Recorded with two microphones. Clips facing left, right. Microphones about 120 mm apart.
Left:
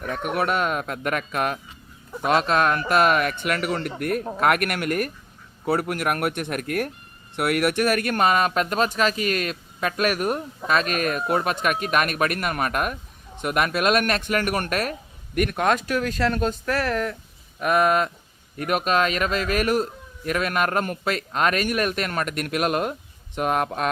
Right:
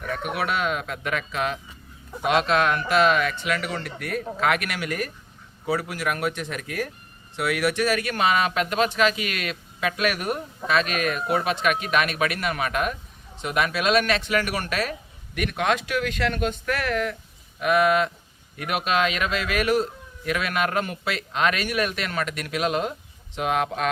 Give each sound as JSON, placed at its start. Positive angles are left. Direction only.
{"t": 0.2, "sound": "a man's voice", "side_deg": 45}
{"t": 2.2, "sound": "a man's voice", "side_deg": 40}